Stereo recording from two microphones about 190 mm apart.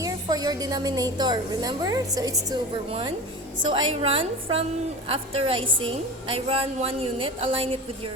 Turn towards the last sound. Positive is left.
turn(degrees=-30)  # may be behind; listen again after turning